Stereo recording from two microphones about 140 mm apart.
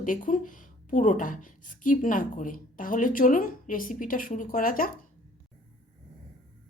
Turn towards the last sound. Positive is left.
turn(degrees=90)